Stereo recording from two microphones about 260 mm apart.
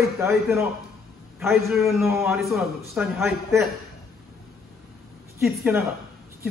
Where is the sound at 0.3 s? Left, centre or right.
Centre.